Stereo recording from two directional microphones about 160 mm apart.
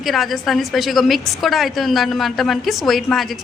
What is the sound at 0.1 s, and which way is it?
A woman's voice, centre (ahead or behind).